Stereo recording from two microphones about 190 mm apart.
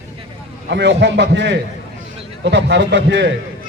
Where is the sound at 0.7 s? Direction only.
65° right (ahead or behind).